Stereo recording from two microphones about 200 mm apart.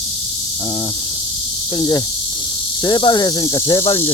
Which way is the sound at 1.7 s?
20° left (ahead or behind).